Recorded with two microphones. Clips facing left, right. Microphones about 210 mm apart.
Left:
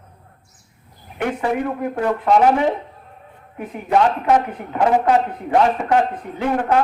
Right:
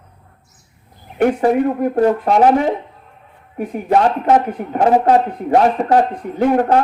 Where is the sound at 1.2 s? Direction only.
40° right (ahead or behind).